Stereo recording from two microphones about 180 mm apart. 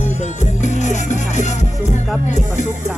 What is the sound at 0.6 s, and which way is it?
Music, 40° left (ahead or behind).